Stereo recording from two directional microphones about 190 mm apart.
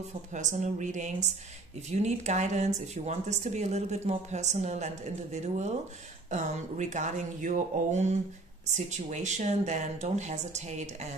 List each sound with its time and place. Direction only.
0.3 s speech: 40° right (ahead or behind)